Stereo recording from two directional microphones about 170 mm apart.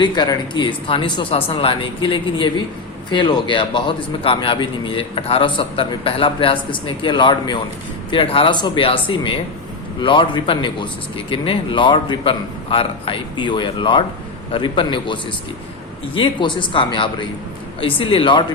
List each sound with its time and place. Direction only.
0.0 s speech: 25° left (ahead or behind)